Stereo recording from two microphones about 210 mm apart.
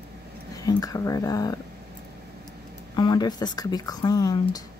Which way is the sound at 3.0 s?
20° left (ahead or behind).